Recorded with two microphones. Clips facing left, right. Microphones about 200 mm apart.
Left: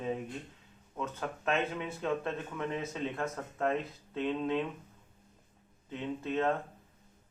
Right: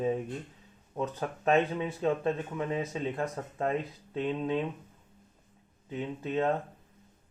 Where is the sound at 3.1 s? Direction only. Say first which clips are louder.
Right 3 dB; 30° right (ahead or behind).